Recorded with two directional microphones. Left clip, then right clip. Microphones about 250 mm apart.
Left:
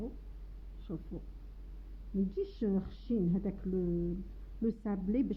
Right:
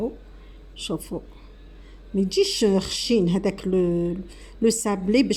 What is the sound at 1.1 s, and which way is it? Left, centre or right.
Speech, right.